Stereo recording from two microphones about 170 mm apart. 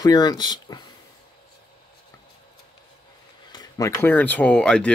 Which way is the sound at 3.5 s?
25° left (ahead or behind).